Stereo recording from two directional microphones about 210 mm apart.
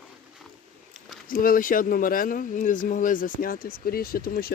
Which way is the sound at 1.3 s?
40° left (ahead or behind).